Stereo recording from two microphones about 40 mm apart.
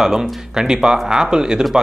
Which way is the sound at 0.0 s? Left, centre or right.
Centre.